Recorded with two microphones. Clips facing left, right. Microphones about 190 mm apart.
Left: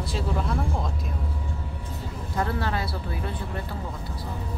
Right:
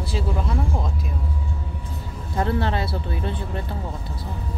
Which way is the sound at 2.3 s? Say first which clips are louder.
Right 4 dB; 25° right (ahead or behind).